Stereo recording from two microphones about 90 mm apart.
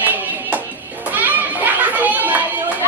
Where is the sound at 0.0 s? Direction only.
20° right (ahead or behind).